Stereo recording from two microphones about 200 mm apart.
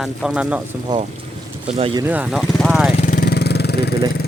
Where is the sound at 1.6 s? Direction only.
30° right (ahead or behind).